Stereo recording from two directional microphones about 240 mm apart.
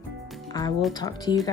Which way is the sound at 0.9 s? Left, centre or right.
Centre.